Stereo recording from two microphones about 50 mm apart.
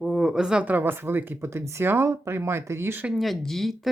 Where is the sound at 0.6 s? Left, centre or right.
Right.